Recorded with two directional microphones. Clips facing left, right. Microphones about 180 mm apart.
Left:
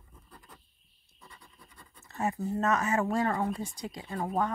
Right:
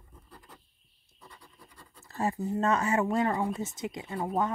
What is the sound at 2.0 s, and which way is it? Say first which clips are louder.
Speech: right 1 dB; 35° right (ahead or behind).